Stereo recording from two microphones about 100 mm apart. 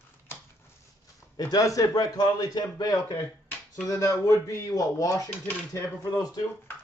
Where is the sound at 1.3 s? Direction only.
40° left (ahead or behind).